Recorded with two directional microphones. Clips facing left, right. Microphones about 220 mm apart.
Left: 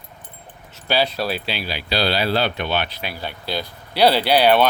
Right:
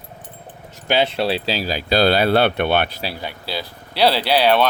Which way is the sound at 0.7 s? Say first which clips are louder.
Right 2 dB; 20° right (ahead or behind).